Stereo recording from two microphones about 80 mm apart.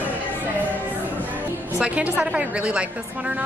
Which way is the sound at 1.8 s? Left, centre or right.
Centre.